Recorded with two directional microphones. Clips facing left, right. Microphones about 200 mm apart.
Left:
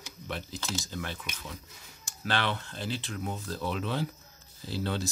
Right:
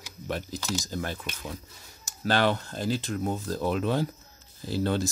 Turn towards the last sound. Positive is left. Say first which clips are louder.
# right 6 dB
turn(degrees=-45)  # may be behind; listen again after turning